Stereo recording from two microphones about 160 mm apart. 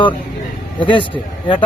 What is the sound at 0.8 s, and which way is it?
Speech, 30° left (ahead or behind).